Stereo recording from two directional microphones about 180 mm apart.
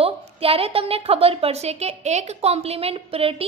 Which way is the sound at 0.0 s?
30° right (ahead or behind).